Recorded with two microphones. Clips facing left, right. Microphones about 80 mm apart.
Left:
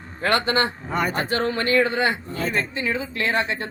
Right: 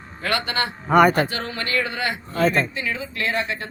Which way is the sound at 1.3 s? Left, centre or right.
Left.